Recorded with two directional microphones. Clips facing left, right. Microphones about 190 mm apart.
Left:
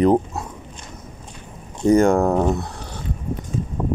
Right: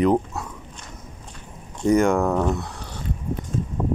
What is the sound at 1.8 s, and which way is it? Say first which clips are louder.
Speech: left 3 dB; 35° left (ahead or behind).